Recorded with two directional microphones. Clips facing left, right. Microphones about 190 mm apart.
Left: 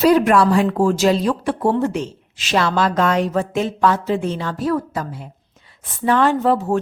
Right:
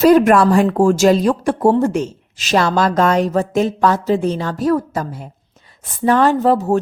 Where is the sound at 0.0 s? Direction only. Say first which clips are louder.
Right 3 dB; 45° right (ahead or behind).